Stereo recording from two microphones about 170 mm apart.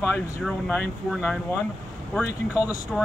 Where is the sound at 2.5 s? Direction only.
20° left (ahead or behind).